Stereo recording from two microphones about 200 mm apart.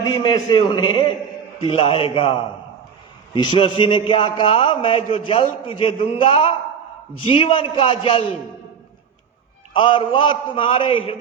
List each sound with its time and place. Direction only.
0.0 s a man's voice: 20° left (ahead or behind)
9.7 s a man's voice: 25° left (ahead or behind)